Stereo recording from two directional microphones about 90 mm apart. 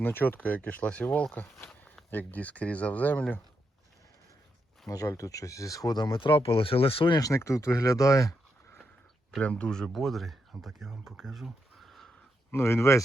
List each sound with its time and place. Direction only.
0.0 s speech: 25° left (ahead or behind)
4.9 s speech: 40° left (ahead or behind); by 7.2 s 80° left
7.2 s speech: 35° left (ahead or behind)
9.4 s speech: 15° left (ahead or behind)
12.5 s speech: 30° left (ahead or behind)